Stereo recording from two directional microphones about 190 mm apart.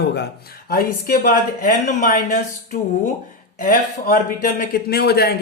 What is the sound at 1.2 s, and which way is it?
Speech, 45° left (ahead or behind).